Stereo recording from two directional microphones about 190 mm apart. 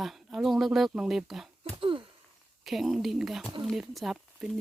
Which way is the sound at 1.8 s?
25° right (ahead or behind).